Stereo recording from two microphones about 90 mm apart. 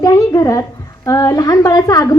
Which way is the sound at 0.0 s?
40° left (ahead or behind).